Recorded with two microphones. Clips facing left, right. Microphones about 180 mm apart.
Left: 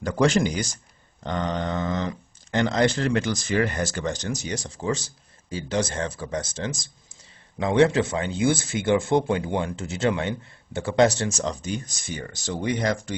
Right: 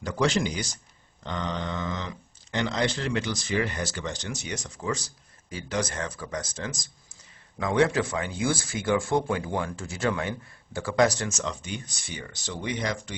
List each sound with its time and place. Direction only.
0.0 s speech: 50° left (ahead or behind)